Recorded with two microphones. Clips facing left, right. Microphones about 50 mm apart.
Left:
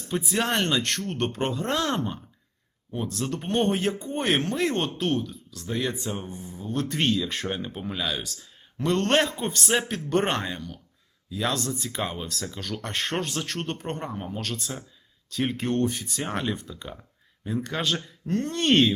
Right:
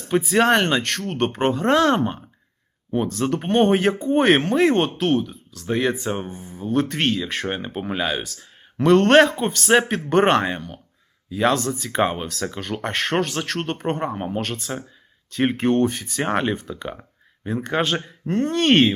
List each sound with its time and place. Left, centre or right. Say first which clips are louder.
0.3 s speech: right 7 dB; right
3.3 s speech: right 7 dB; right
6.3 s speech: right 8 dB; right